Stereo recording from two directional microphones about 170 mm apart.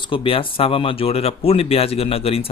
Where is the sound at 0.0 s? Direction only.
30° left (ahead or behind).